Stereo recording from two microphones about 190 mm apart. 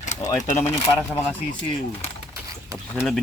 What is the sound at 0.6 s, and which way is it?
Speech, 35° left (ahead or behind).